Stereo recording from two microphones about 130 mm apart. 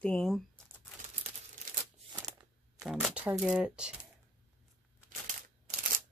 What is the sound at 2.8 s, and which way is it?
Speech, 5° right (ahead or behind).